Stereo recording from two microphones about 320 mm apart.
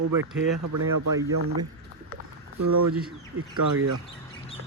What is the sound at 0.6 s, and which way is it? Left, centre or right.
Speech, right.